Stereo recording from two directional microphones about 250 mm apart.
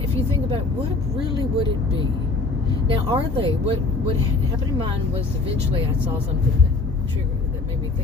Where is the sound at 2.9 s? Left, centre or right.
Right.